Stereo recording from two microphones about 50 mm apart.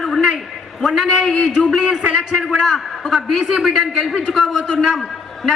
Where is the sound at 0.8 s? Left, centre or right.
Centre.